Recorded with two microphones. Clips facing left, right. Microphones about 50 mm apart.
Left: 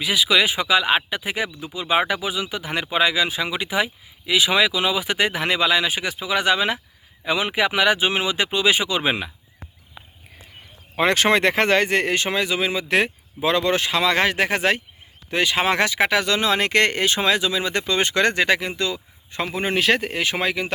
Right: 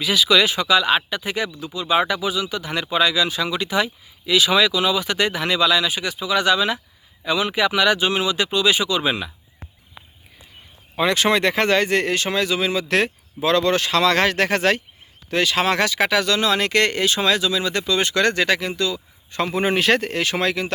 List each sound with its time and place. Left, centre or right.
0.0 s speech: centre; by 9.3 s left
10.9 s speech: left
19.5 s speech: centre
20.1 s speech: centre